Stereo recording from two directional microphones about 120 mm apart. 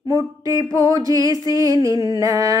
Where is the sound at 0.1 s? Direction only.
30° right (ahead or behind).